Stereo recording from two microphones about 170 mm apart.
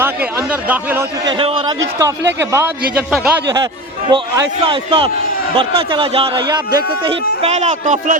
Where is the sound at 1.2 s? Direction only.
30° right (ahead or behind).